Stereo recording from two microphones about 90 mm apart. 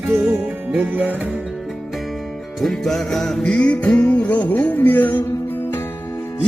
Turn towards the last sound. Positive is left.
turn(degrees=30)  # may be behind; listen again after turning